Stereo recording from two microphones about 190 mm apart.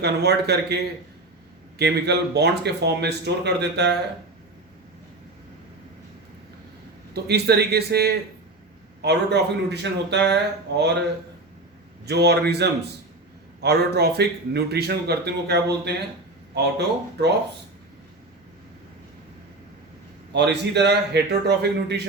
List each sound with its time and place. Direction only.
0.0 s a man's voice: 60° right (ahead or behind)
1.8 s a man's voice: 60° right (ahead or behind)
7.1 s a man's voice: 60° right (ahead or behind)
12.0 s a man's voice: 60° right (ahead or behind)
20.3 s a man's voice: 65° right (ahead or behind)